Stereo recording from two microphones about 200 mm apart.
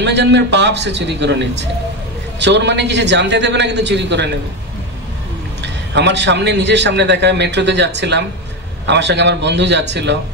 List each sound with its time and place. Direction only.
0.0 s a man's voice: 60° right (ahead or behind)
5.6 s a man's voice: 60° right (ahead or behind)